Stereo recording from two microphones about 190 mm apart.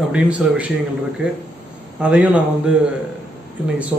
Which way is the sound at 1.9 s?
5° right (ahead or behind).